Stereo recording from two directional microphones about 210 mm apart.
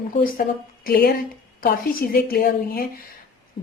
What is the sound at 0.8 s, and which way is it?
A woman's voice, 45° left (ahead or behind).